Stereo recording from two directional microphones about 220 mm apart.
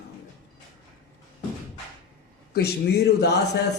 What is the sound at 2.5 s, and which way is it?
Speech, 45° left (ahead or behind).